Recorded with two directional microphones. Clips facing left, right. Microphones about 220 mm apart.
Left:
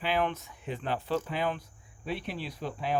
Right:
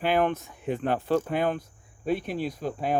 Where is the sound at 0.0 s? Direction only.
50° right (ahead or behind).